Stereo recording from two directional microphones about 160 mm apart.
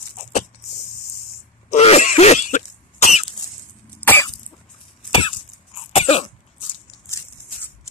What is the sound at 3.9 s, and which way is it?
Cough, 10° left (ahead or behind).